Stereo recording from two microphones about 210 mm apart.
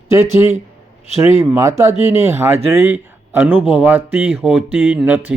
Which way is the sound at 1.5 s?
15° right (ahead or behind).